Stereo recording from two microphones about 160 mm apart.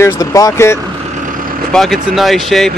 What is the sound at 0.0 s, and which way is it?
Speech, 20° left (ahead or behind).